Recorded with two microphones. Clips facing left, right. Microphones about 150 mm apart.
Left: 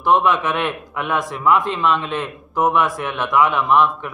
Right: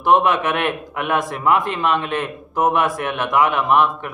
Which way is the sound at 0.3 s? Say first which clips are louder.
Even; 60° right (ahead or behind).